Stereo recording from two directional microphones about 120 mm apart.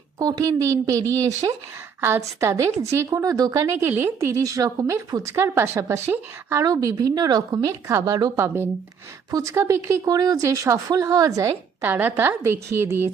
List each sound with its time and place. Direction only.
0.2 s speech: 30° right (ahead or behind)
11.8 s a woman's voice: 15° right (ahead or behind)